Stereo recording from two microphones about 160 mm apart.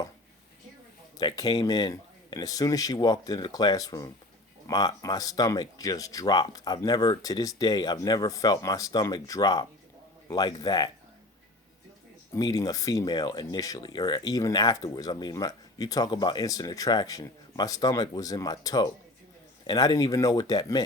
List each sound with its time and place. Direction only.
1.2 s speech: 25° left (ahead or behind)
12.3 s speech: 20° left (ahead or behind)